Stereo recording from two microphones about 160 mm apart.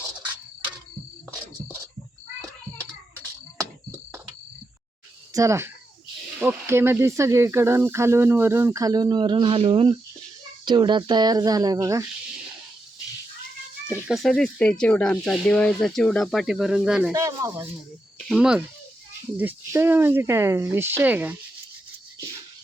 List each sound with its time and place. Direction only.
5.3 s speech: 20° right (ahead or behind)
13.8 s speech: 5° right (ahead or behind)
17.1 s speech: 20° right (ahead or behind)
18.3 s speech: 5° right (ahead or behind)